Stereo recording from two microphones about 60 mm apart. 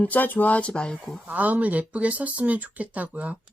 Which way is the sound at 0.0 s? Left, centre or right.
Left.